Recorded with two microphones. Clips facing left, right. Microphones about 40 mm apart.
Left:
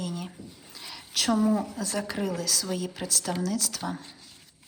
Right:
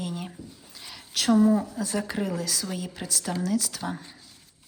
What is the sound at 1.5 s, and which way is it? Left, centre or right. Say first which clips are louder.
Speech: right 2 dB; centre.